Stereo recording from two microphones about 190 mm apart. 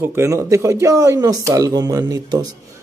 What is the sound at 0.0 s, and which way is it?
A man's voice, 15° right (ahead or behind).